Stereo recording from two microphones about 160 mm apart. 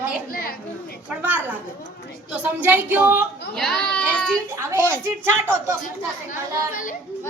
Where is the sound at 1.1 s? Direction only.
10° right (ahead or behind).